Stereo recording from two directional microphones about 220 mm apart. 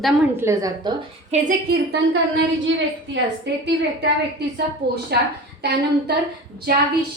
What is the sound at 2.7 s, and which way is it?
Speech, 60° right (ahead or behind).